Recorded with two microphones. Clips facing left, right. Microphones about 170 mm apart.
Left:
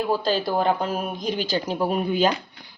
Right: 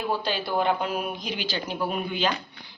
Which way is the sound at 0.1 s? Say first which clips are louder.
Left 4 dB; 40° left (ahead or behind).